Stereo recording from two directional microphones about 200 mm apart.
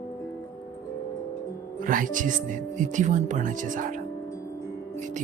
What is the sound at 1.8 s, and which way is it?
Speech, 45° right (ahead or behind).